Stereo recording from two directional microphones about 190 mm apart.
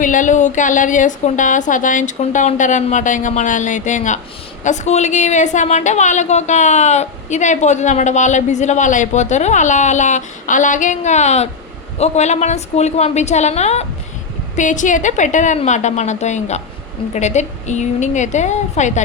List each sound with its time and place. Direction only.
0.0 s a woman's voice: 40° left (ahead or behind)